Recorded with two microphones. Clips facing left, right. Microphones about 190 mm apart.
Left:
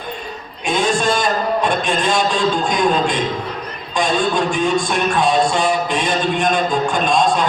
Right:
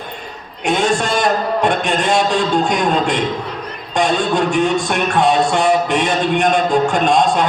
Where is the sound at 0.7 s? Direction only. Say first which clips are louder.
Right 1 dB; 65° right (ahead or behind).